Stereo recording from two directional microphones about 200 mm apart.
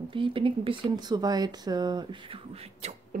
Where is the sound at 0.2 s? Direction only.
25° right (ahead or behind).